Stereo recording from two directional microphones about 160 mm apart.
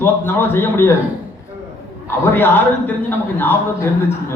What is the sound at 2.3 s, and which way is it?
A man's voice, 10° left (ahead or behind).